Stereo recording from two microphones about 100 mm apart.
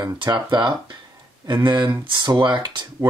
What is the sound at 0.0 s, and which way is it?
Speech, 40° right (ahead or behind).